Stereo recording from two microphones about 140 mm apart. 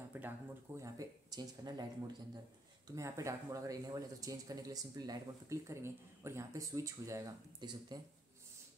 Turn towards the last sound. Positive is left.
turn(degrees=-30)  # may be behind; listen again after turning